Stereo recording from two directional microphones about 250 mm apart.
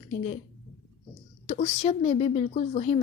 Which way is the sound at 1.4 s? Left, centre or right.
Left.